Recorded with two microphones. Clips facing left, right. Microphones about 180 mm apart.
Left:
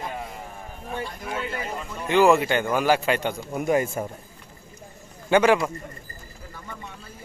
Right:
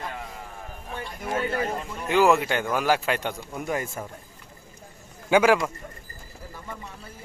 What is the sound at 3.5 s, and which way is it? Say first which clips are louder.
Speech: left 9 dB; 15° left (ahead or behind).